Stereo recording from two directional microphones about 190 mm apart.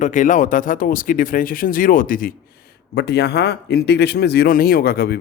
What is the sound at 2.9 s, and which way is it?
Speech, 60° left (ahead or behind).